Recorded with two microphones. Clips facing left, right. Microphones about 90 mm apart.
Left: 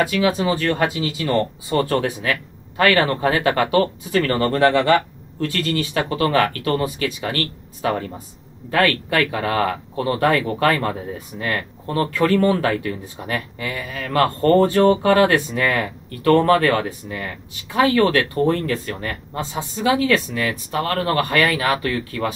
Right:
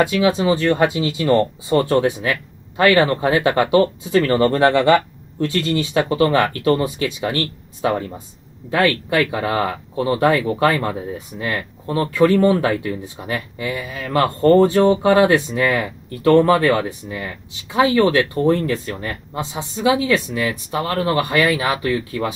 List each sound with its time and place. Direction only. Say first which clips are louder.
0.0 s speech: right 2 dB; 25° right (ahead or behind)